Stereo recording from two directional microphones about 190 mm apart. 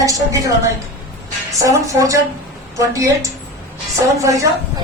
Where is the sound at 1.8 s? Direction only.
15° right (ahead or behind).